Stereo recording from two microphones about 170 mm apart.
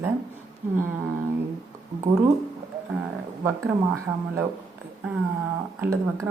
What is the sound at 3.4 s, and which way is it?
Speech, 15° right (ahead or behind).